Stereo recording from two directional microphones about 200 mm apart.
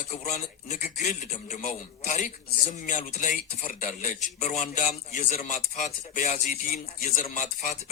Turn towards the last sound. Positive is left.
turn(degrees=35)  # may be behind; listen again after turning